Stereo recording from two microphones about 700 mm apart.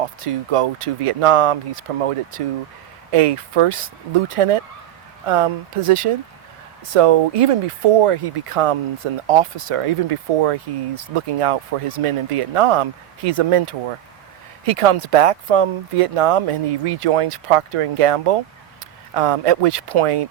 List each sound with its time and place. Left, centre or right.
0.0 s speech: right